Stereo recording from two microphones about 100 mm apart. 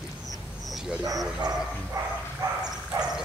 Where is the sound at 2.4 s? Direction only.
40° right (ahead or behind).